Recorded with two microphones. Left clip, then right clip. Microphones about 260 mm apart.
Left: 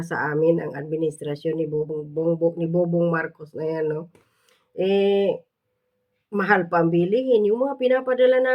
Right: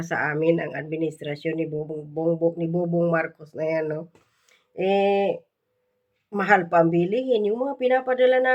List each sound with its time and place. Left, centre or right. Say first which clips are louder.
0.2 s speech: left 2 dB; centre
4.4 s a sound: left 1 dB; centre
6.3 s speech: right 1 dB; centre